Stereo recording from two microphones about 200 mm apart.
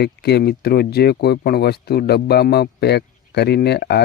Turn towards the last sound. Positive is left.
turn(degrees=55)  # may be behind; listen again after turning